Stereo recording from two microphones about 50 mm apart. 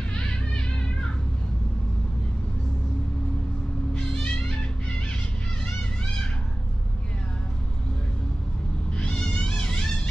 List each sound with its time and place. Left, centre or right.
0.1 s music: centre
3.9 s music: centre
8.9 s cat: left
9.3 s music: centre